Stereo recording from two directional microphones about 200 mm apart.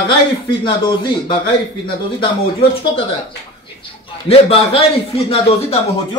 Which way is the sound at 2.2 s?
25° left (ahead or behind).